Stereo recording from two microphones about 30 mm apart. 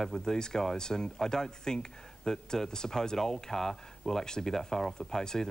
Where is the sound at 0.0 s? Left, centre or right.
Centre.